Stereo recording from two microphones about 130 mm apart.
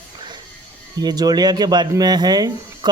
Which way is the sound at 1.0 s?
30° right (ahead or behind).